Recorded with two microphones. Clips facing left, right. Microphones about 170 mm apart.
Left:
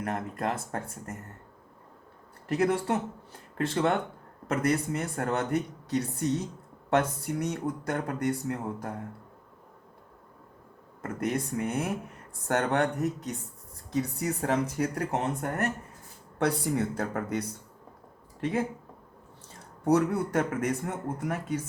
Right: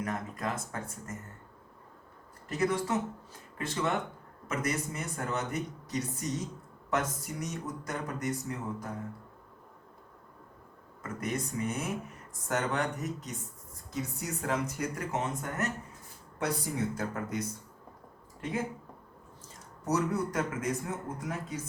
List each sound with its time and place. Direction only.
0.0 s speech: 60° left (ahead or behind)
2.5 s speech: 60° left (ahead or behind)
4.4 s speech: 60° left (ahead or behind)
11.0 s speech: 60° left (ahead or behind)
19.8 s speech: 60° left (ahead or behind)